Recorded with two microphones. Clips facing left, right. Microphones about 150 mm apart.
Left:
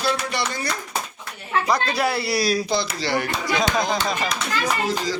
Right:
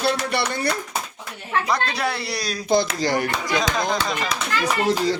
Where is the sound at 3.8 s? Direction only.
5° left (ahead or behind).